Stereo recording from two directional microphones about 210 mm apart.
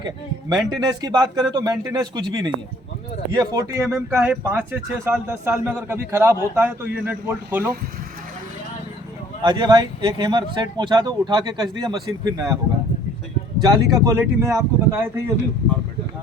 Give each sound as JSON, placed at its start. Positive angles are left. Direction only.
{"t": 0.0, "sound": "a man's voice", "side_deg": -20}
{"t": 9.4, "sound": "speech", "side_deg": -20}
{"t": 13.6, "sound": "speech", "side_deg": -15}